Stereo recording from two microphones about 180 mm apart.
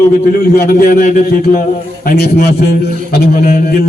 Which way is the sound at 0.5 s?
55° left (ahead or behind).